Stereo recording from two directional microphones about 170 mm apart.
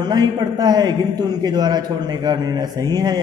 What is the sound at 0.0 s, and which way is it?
A man's voice, 25° right (ahead or behind).